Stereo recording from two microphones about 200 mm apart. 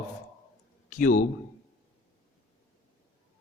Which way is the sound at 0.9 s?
40° left (ahead or behind).